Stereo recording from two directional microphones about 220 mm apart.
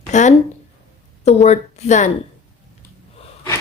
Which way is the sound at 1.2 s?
30° left (ahead or behind).